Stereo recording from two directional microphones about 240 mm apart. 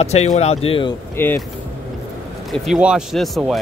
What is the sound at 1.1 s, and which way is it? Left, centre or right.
Speech, centre.